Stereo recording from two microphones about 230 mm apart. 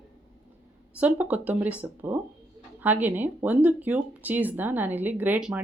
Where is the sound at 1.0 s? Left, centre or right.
Centre.